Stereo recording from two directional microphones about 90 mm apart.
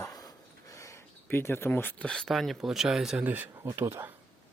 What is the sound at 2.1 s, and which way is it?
Speech, 5° left (ahead or behind).